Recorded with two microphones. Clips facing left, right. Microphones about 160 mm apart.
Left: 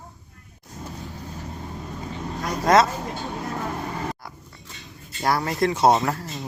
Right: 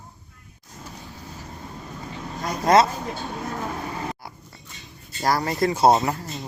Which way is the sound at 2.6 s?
Centre (ahead or behind).